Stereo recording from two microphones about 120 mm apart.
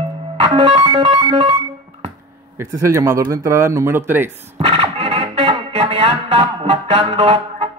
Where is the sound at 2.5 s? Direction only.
25° right (ahead or behind).